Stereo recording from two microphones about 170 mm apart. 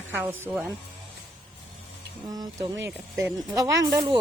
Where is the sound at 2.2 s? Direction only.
25° right (ahead or behind).